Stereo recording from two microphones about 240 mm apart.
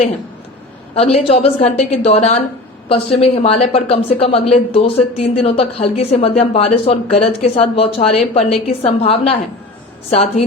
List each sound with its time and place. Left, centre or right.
0.9 s a woman's voice: left